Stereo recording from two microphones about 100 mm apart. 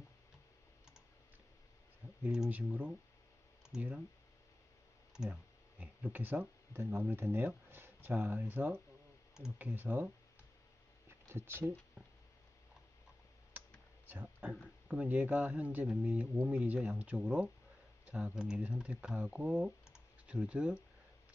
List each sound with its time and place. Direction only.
2.2 s speech: 10° right (ahead or behind)
5.1 s speech: 5° right (ahead or behind)
11.1 s a sound: 25° right (ahead or behind)
14.0 s a sound: 20° right (ahead or behind)
14.4 s speech: centre (ahead or behind)
14.9 s speech: 15° right (ahead or behind)